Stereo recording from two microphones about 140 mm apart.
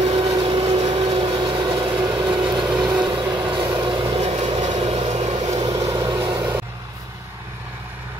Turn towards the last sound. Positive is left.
turn(degrees=-25)  # may be behind; listen again after turning